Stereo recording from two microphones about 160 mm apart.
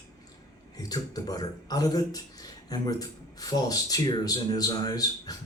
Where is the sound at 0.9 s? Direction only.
25° left (ahead or behind).